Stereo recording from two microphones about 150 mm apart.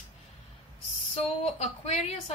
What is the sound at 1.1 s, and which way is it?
A woman's voice, 45° left (ahead or behind).